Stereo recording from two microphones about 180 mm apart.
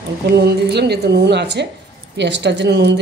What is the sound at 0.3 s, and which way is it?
A woman's voice, 65° right (ahead or behind).